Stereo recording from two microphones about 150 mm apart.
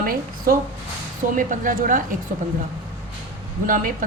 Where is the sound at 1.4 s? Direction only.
65° right (ahead or behind).